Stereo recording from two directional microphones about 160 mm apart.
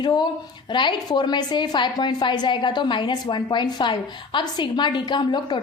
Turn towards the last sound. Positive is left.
turn(degrees=30)  # may be behind; listen again after turning